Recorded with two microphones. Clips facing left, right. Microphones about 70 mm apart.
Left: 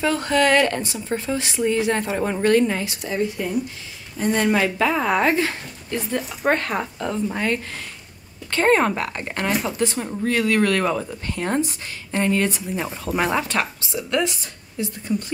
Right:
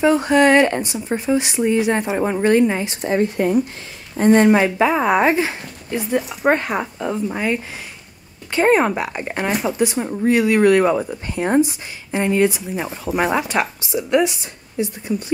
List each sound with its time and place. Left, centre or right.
0.0 s a woman's voice: right
3.0 s speech: right
4.5 s speech: right